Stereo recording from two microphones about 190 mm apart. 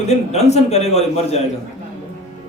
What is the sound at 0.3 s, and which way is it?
A man's voice, 35° left (ahead or behind).